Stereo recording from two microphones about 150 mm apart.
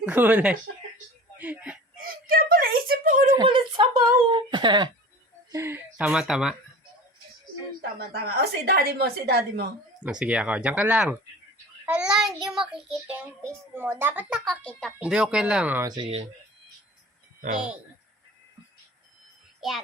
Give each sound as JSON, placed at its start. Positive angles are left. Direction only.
{"t": 0.0, "sound": "a child's voice", "side_deg": -10}
{"t": 1.4, "sound": "a sound", "side_deg": -10}
{"t": 2.0, "sound": "a sound", "side_deg": -75}
{"t": 3.3, "sound": "a sound", "side_deg": -35}
{"t": 5.5, "sound": "a sound", "side_deg": -20}
{"t": 6.1, "sound": "a child's voice", "side_deg": -5}
{"t": 7.8, "sound": "a woman's voice", "side_deg": -90}
{"t": 10.0, "sound": "a child's voice", "side_deg": -10}
{"t": 11.9, "sound": "child singing", "side_deg": -5}
{"t": 12.5, "sound": "a child's voice", "side_deg": 0}
{"t": 13.1, "sound": "a child's voice", "side_deg": -15}
{"t": 14.4, "sound": "a child's voice", "side_deg": 5}
{"t": 14.9, "sound": "a child's voice", "side_deg": -5}
{"t": 15.8, "sound": "speech", "side_deg": -25}